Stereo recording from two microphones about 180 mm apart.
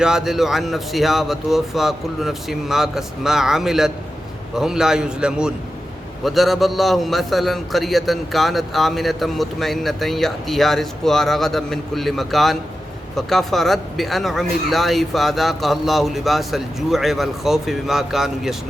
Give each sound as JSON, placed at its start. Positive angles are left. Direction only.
{"t": 0.0, "sound": "a man's voice", "side_deg": -5}